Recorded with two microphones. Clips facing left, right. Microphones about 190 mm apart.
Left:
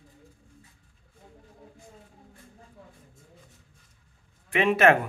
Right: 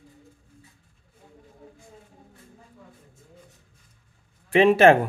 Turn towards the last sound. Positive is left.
turn(degrees=-30)  # may be behind; listen again after turning